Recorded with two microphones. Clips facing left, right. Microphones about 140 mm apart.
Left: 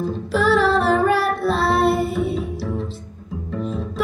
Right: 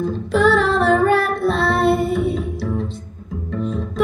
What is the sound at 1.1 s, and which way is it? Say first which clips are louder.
Music: right 2 dB; centre (ahead or behind).